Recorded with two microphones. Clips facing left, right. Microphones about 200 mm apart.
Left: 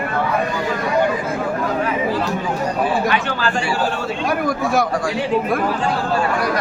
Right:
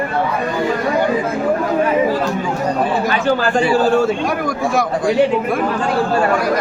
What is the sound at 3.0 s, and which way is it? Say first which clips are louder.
Speech: right 3 dB; 40° right (ahead or behind).